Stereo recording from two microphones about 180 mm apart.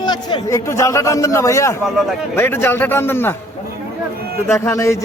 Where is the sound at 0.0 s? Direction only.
25° left (ahead or behind).